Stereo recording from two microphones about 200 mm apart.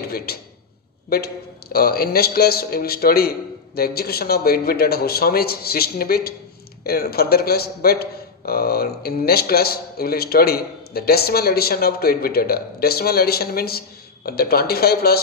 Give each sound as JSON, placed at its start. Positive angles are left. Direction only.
{"t": 0.3, "sound": "a man's voice", "side_deg": 50}